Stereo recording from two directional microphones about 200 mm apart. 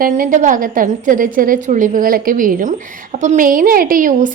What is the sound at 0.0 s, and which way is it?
A woman's voice, 40° right (ahead or behind).